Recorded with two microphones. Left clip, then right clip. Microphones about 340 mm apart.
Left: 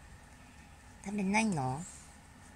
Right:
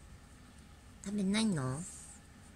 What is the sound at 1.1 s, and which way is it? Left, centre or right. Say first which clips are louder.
Speech: left 3 dB; centre.